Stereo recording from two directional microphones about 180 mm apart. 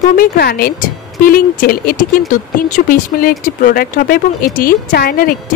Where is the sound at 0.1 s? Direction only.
55° left (ahead or behind).